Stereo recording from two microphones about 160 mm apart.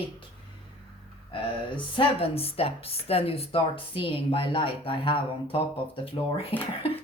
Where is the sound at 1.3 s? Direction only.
30° left (ahead or behind).